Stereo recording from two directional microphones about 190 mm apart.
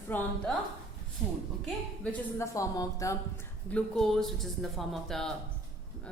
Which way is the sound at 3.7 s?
5° left (ahead or behind).